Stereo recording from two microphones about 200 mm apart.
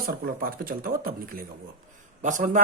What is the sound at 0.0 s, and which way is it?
Speech, 45° right (ahead or behind).